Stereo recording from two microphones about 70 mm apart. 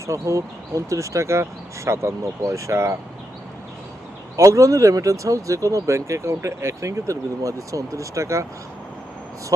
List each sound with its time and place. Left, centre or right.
0.1 s speech: right
4.4 s speech: right
9.5 s speech: right